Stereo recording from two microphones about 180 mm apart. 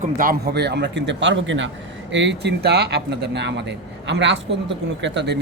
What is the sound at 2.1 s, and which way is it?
A man's voice, 75° right (ahead or behind).